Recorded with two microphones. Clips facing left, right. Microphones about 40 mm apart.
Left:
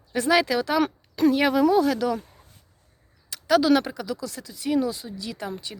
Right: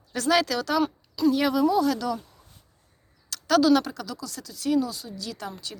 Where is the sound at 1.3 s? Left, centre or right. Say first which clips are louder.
Left 3 dB; left.